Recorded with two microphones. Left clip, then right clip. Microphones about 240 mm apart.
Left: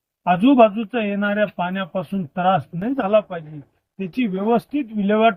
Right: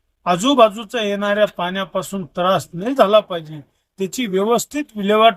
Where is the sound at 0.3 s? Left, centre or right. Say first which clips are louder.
Right 1 dB; right.